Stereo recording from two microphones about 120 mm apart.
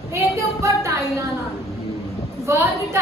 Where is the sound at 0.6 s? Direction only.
25° right (ahead or behind).